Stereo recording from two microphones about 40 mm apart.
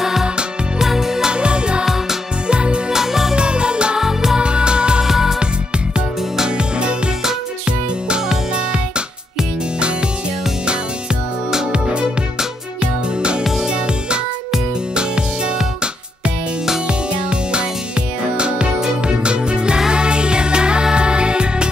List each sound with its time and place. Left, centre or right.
0.0 s music: centre
1.3 s music: right
2.9 s music: centre
3.3 s music: right
4.0 s music: centre
4.4 s music: right
5.0 s music: centre
11.7 s music: right